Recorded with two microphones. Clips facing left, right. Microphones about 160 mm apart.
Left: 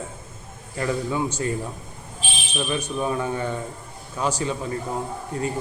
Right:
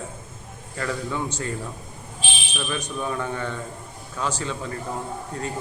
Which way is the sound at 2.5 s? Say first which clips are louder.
Left 4 dB; 20° left (ahead or behind).